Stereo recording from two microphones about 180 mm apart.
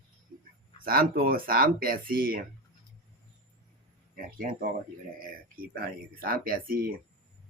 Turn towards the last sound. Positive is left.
turn(degrees=-55)  # may be behind; listen again after turning